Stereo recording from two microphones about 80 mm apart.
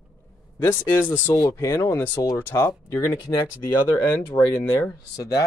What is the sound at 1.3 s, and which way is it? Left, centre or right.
Speech, left.